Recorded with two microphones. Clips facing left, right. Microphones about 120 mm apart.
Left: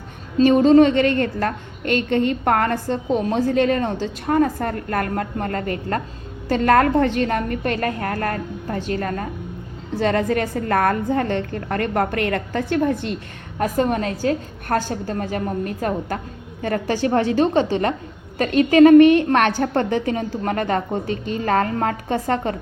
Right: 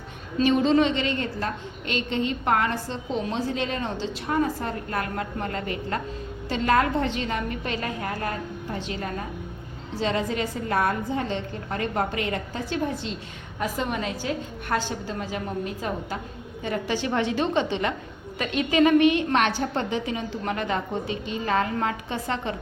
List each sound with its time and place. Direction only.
0.3 s a woman's voice: 45° left (ahead or behind)